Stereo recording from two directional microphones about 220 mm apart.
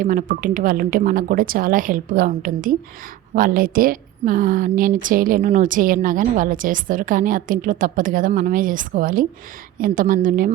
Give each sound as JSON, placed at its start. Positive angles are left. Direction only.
{"t": 0.0, "sound": "a woman's voice", "side_deg": -35}